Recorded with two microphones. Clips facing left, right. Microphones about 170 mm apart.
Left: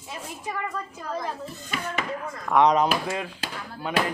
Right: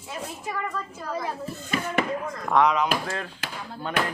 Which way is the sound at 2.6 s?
40° left (ahead or behind).